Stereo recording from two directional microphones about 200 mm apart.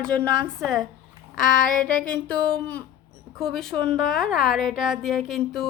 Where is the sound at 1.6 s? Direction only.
45° left (ahead or behind).